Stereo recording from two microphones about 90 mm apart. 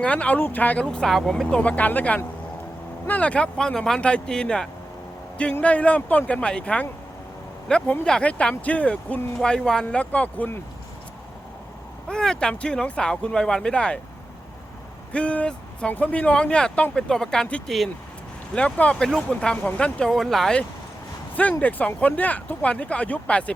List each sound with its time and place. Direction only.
0.0 s speech: 15° left (ahead or behind)
0.9 s speech: 5° left (ahead or behind)
12.0 s speech: 10° left (ahead or behind)
15.1 s speech: 15° left (ahead or behind)